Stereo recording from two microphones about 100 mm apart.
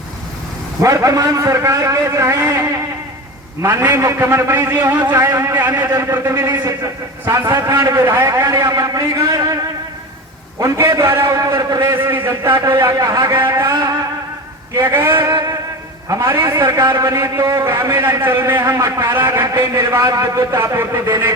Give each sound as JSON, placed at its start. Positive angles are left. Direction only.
{"t": 0.8, "sound": "a man's voice", "side_deg": -35}
{"t": 6.7, "sound": "a man's voice", "side_deg": -30}
{"t": 10.6, "sound": "a man's voice", "side_deg": -30}
{"t": 14.8, "sound": "a man's voice", "side_deg": -25}
{"t": 15.3, "sound": "music", "side_deg": -40}
{"t": 16.0, "sound": "a man's voice", "side_deg": -30}